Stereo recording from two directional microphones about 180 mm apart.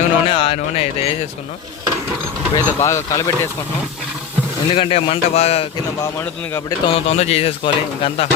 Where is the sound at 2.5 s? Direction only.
15° left (ahead or behind).